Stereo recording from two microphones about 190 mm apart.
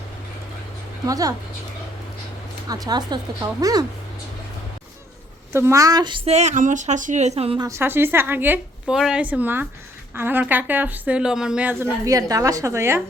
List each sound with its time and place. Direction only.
1.0 s speech: 20° right (ahead or behind)
2.6 s speech: 20° right (ahead or behind)
5.5 s a woman's voice: 15° right (ahead or behind); by 7.7 s 30° right (ahead or behind)
7.7 s a woman's voice: 10° right (ahead or behind)